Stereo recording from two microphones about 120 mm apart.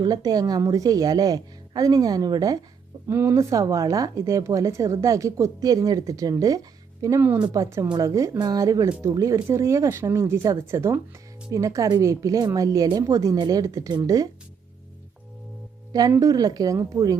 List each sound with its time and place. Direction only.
0.0 s a woman's voice: 35° right (ahead or behind)
3.1 s speech: 20° right (ahead or behind)
7.2 s speech: 15° right (ahead or behind)
7.4 s a woman's voice: 30° right (ahead or behind)
15.9 s a woman's voice: 30° right (ahead or behind)